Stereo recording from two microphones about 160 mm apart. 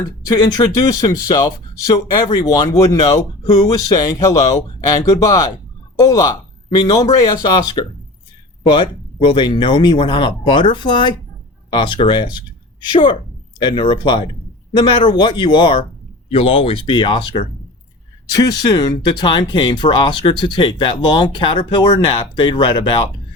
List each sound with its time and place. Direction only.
0.3 s speech: 25° left (ahead or behind)